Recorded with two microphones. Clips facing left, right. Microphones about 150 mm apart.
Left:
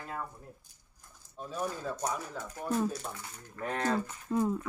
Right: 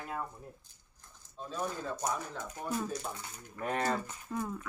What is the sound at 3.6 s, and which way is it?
Speech, 5° right (ahead or behind).